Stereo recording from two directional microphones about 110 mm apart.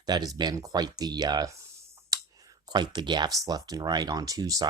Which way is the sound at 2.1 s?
35° right (ahead or behind).